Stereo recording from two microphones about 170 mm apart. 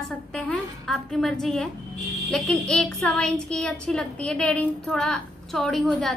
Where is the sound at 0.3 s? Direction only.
5° left (ahead or behind).